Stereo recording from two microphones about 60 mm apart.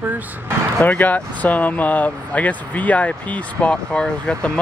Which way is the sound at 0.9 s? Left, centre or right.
Left.